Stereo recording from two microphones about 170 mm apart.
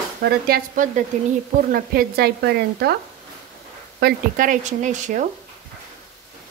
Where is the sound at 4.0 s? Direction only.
50° right (ahead or behind).